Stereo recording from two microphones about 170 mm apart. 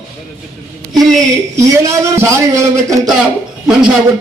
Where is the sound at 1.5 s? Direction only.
15° right (ahead or behind).